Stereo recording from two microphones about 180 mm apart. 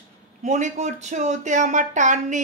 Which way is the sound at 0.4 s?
40° right (ahead or behind).